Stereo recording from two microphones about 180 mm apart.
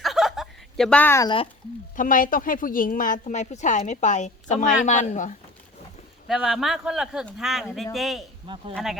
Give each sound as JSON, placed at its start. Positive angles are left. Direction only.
{"t": 0.0, "sound": "chuckle", "side_deg": 0}
{"t": 2.0, "sound": "a woman's voice", "side_deg": 50}
{"t": 6.2, "sound": "speech", "side_deg": 0}